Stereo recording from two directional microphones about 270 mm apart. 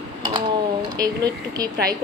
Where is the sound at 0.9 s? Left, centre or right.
Centre.